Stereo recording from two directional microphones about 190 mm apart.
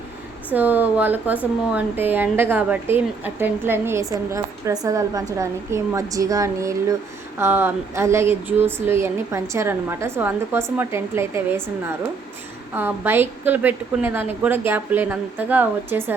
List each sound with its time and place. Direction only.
0.5 s speech: 10° right (ahead or behind)